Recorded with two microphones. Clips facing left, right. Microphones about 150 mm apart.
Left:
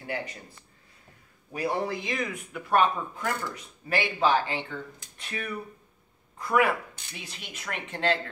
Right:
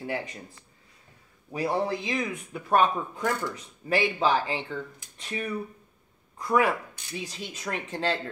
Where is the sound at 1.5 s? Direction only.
30° right (ahead or behind).